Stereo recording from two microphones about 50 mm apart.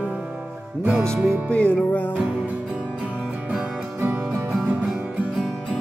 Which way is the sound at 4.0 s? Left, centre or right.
Right.